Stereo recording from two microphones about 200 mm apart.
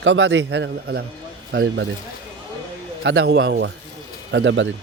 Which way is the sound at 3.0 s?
55° right (ahead or behind).